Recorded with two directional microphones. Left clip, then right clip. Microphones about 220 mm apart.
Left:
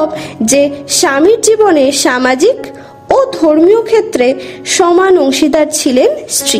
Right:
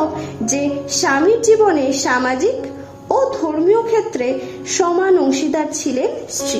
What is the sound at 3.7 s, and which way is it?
A woman's voice, 50° left (ahead or behind).